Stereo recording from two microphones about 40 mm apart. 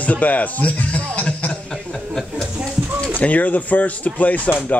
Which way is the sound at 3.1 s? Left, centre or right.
Left.